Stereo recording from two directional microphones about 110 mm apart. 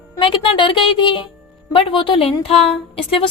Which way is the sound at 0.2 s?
50° left (ahead or behind).